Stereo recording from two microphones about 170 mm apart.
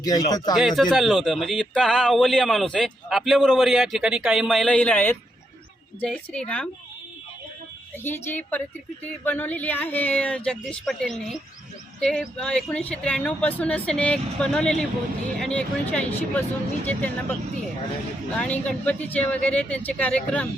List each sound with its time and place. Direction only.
0.0 s speech: 20° left (ahead or behind)
0.8 s speech: centre (ahead or behind)
8.0 s speech: 10° left (ahead or behind)
18.3 s speech: 10° left (ahead or behind)